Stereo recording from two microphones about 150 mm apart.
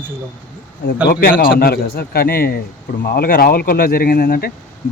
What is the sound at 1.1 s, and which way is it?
Speech, 80° left.